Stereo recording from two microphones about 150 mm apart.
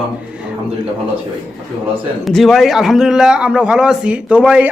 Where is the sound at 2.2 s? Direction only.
Centre (ahead or behind).